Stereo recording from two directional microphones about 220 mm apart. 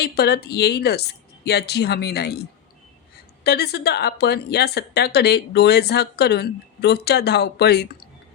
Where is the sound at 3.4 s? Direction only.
45° left (ahead or behind).